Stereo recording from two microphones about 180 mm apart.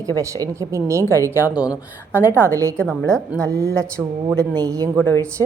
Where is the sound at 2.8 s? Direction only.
5° left (ahead or behind).